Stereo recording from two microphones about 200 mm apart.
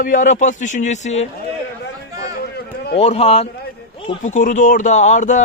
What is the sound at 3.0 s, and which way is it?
A man's voice, 30° left (ahead or behind).